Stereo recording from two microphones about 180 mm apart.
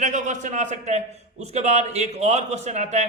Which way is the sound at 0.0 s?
40° right (ahead or behind).